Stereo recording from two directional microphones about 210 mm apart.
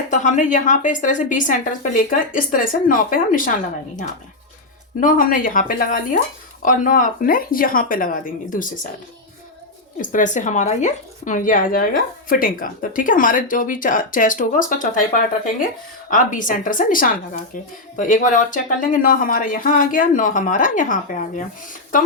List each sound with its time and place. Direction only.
0.1 s speech: 35° left (ahead or behind)
4.9 s speech: 40° left (ahead or behind)
10.0 s speech: 40° left (ahead or behind)